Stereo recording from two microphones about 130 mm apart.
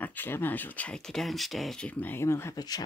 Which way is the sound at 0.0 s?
15° left (ahead or behind).